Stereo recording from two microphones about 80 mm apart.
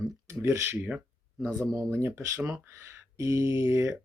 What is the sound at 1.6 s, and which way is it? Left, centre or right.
Speech, right.